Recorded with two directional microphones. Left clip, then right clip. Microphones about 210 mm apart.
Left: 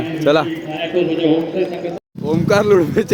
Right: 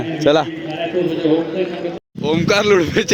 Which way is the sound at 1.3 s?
40° left (ahead or behind).